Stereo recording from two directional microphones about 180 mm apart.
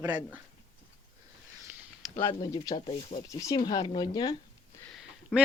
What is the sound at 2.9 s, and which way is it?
Speech, 40° left (ahead or behind).